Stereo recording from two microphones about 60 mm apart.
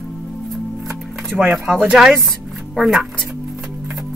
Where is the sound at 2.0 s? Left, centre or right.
Centre.